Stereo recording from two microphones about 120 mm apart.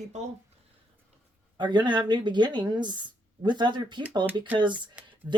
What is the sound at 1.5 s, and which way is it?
A woman's voice, 40° right (ahead or behind).